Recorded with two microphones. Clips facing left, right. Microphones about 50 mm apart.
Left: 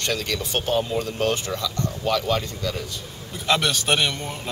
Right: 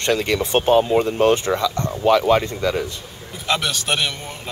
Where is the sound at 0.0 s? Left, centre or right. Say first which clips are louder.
Right 7 dB; right.